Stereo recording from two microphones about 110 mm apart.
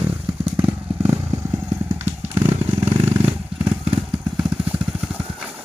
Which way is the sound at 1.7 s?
20° right (ahead or behind).